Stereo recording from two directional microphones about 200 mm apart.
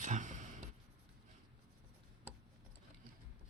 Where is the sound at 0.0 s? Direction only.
40° right (ahead or behind).